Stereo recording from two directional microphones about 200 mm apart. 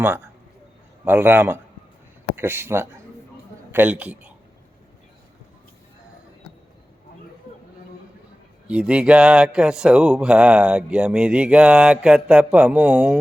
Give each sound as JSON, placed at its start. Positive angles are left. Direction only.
{"t": 1.0, "sound": "a man's voice", "side_deg": -10}
{"t": 8.6, "sound": "speech", "side_deg": -5}